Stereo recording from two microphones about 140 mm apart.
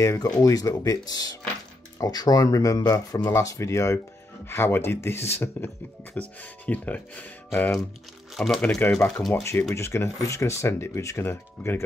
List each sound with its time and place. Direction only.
0.0 s speech: 25° left (ahead or behind)
8.4 s speech: 5° left (ahead or behind)
9.3 s speech: 20° left (ahead or behind)